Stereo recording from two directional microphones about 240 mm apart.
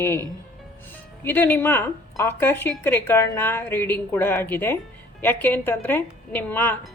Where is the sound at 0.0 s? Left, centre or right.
Centre.